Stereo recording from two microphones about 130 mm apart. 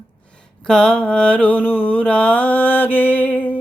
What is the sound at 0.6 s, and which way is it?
Mantra, 5° left (ahead or behind).